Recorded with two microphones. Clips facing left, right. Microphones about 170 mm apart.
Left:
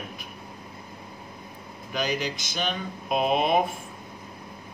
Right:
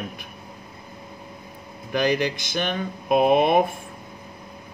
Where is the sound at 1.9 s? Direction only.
55° right (ahead or behind).